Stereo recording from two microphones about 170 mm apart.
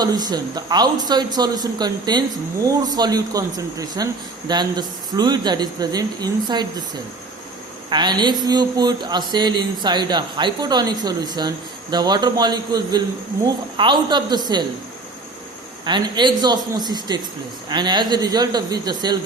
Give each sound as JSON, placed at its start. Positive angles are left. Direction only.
{"t": 0.0, "sound": "speech", "side_deg": -25}
{"t": 7.9, "sound": "speech", "side_deg": -25}
{"t": 15.8, "sound": "speech", "side_deg": -25}